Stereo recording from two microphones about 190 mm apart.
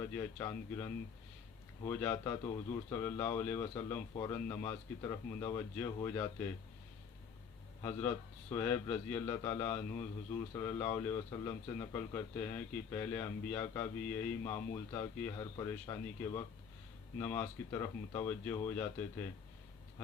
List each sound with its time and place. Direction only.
0.0 s a man's voice: 15° left (ahead or behind)
7.8 s a man's voice: 15° left (ahead or behind)